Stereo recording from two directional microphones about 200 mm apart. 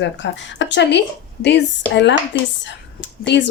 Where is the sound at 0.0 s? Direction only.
65° left (ahead or behind).